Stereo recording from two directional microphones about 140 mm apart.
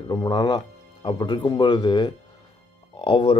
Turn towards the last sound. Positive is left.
turn(degrees=35)  # may be behind; listen again after turning